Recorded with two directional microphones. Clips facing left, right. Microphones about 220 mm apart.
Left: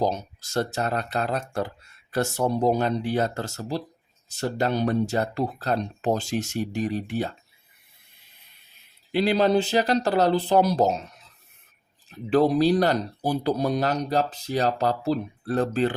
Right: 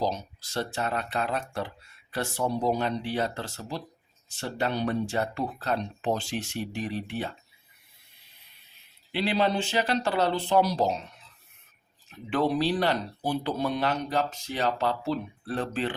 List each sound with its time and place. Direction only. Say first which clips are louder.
0.0 s speech: left 4 dB; 45° left (ahead or behind)
9.1 s speech: left 6 dB; 40° left (ahead or behind)